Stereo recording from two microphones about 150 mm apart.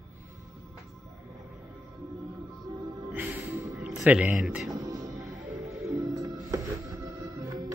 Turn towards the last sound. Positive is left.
turn(degrees=-25)  # may be behind; listen again after turning